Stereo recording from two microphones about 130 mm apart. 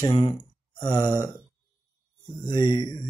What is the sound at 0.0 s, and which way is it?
Speech, 40° left (ahead or behind).